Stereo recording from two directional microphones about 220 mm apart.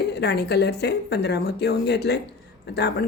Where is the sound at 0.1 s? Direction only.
50° left (ahead or behind).